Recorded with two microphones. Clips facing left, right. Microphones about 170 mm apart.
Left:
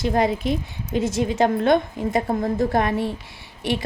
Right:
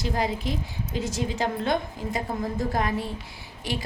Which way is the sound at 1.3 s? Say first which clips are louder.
Left 9 dB; 60° left (ahead or behind).